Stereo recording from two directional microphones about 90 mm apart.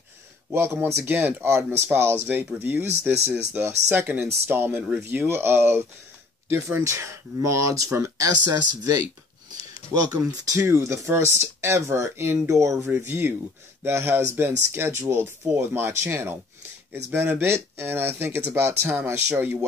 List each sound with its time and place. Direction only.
0.5 s speech: 25° right (ahead or behind)
10.3 s speech: 35° right (ahead or behind)
12.9 s speech: 25° right (ahead or behind)